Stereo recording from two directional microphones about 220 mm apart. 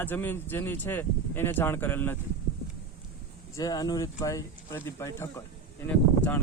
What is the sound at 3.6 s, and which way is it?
Speech, 15° left (ahead or behind).